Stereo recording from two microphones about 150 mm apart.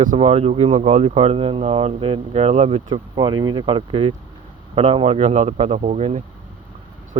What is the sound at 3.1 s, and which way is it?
Speech, 30° right (ahead or behind).